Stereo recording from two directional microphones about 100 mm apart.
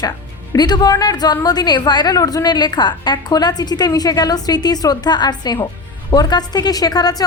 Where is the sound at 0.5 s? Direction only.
40° left (ahead or behind).